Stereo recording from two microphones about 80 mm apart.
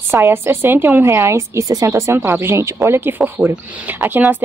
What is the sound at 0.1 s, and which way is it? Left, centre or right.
A woman's voice, right.